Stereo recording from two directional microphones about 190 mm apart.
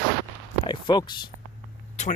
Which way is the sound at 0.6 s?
25° left (ahead or behind).